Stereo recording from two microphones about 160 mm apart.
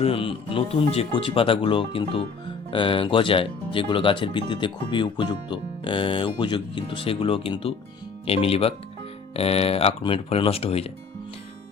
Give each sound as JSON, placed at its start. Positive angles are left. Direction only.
{"t": 0.0, "sound": "speech", "side_deg": 35}